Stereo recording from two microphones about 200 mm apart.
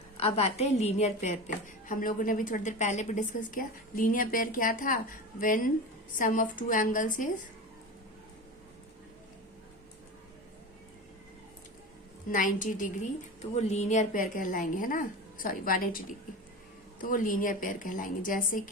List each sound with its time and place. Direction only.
0.2 s a woman's voice: 30° left (ahead or behind)
12.3 s a woman's voice: 40° left (ahead or behind)